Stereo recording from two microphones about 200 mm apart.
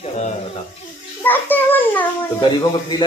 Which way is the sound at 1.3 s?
10° left (ahead or behind).